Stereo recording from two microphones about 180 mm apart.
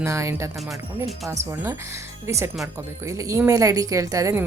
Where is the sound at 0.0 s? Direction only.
15° right (ahead or behind).